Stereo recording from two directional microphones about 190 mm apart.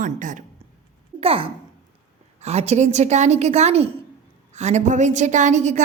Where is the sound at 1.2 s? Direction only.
30° right (ahead or behind).